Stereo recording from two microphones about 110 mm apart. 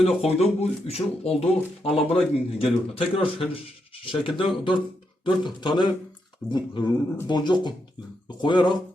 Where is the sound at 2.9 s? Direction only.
55° left (ahead or behind).